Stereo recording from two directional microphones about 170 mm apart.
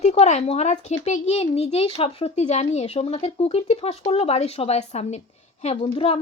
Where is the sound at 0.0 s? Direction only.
40° left (ahead or behind).